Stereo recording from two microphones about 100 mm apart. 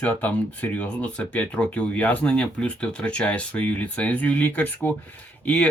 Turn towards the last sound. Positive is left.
turn(degrees=15)  # may be behind; listen again after turning